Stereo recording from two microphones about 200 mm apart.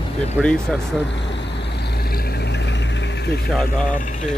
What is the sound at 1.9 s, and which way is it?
Vehicle, 50° left (ahead or behind).